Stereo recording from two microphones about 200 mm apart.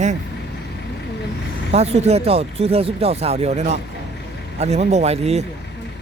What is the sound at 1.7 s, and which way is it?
Speech, 30° right (ahead or behind).